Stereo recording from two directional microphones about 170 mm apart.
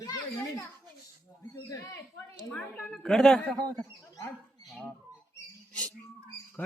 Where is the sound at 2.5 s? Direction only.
5° left (ahead or behind).